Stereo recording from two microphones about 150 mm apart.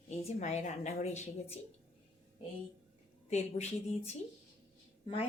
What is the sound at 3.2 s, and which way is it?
Speech, 45° left (ahead or behind).